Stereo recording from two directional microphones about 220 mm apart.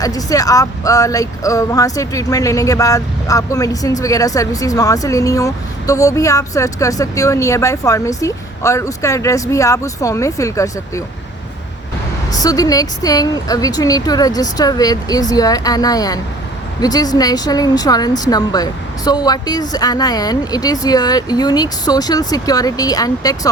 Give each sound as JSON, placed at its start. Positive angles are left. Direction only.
{"t": 0.0, "sound": "speech", "side_deg": 15}
{"t": 12.3, "sound": "speech", "side_deg": 15}